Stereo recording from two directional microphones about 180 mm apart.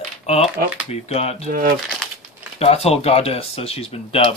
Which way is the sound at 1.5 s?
50° right (ahead or behind).